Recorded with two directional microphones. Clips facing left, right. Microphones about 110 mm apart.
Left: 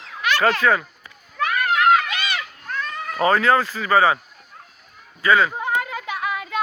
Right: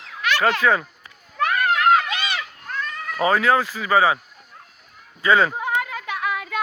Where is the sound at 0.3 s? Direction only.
15° right (ahead or behind).